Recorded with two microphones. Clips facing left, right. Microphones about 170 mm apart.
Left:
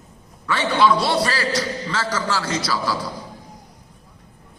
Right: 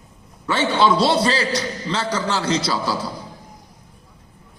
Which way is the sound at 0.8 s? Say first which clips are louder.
Right 1 dB; 25° right (ahead or behind).